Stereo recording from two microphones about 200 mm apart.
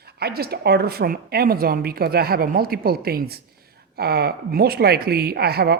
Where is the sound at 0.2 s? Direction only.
50° right (ahead or behind).